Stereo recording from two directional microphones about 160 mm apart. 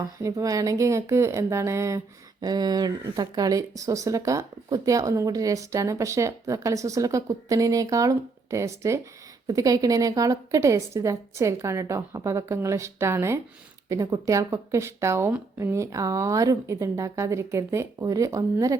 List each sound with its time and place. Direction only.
0.0 s speech: 20° right (ahead or behind)